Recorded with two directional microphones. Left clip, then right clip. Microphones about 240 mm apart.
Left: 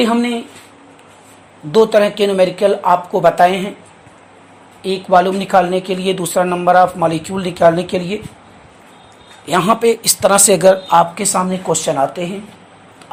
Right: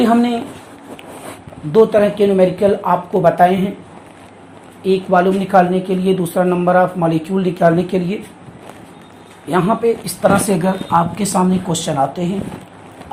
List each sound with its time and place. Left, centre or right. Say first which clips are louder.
1.7 s speech: even; left
4.8 s speech: left 1 dB; left
9.5 s speech: left 3 dB; left